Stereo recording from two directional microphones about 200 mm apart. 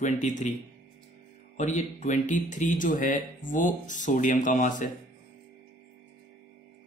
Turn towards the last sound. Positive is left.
turn(degrees=40)  # may be behind; listen again after turning